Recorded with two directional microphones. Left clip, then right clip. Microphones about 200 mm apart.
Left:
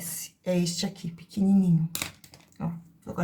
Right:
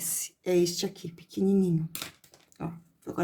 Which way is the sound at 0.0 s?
50° right (ahead or behind).